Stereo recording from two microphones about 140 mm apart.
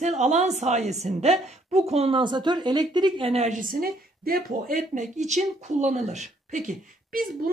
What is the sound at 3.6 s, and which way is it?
Speech, 90° right.